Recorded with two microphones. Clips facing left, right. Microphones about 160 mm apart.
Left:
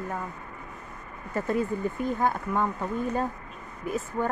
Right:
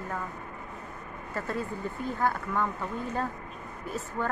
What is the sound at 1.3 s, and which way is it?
Speech, 20° left (ahead or behind).